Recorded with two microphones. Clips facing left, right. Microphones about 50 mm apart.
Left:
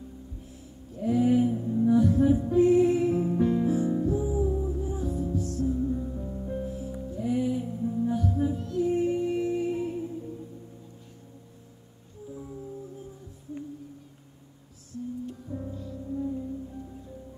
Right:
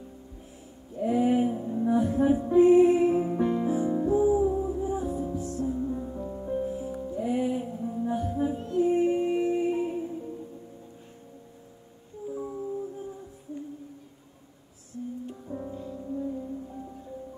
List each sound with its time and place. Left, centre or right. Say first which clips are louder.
0.9 s music: left 1 dB; right
14.9 s music: left 1 dB; right